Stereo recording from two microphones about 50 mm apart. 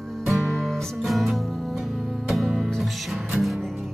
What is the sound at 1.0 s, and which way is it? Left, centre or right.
Music, centre.